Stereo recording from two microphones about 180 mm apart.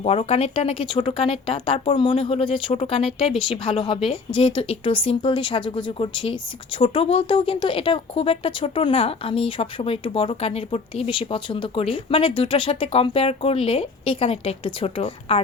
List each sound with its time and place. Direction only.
0.0 s speech: 35° left (ahead or behind)